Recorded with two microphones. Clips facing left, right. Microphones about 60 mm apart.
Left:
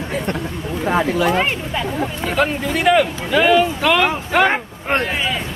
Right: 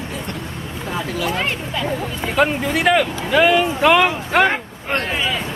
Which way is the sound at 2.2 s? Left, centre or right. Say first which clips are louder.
Right 2 dB; centre.